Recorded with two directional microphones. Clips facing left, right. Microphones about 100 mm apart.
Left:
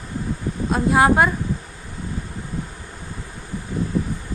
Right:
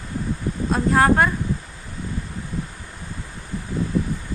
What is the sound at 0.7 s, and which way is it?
Speech, 10° left (ahead or behind).